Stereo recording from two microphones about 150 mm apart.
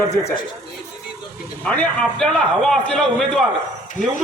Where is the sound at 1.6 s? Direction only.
10° left (ahead or behind).